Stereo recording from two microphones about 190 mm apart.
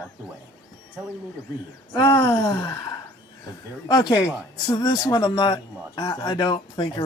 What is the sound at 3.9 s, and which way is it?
Speech, 20° left (ahead or behind).